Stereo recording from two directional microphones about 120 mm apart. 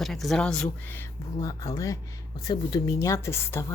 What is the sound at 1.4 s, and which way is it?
Speech, 35° left (ahead or behind).